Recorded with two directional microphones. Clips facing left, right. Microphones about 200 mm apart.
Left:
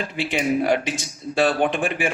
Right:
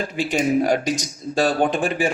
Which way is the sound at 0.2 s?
40° right (ahead or behind).